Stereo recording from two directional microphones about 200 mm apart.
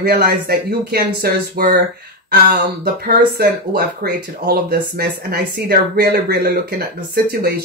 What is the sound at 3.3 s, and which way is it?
Speech, 50° right (ahead or behind).